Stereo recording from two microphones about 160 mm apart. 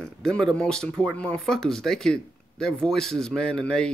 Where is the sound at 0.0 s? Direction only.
5° left (ahead or behind).